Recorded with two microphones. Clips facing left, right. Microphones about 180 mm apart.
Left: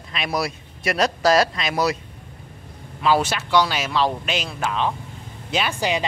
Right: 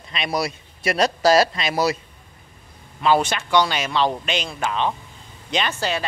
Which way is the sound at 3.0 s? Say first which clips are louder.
Right 1 dB; 5° left (ahead or behind).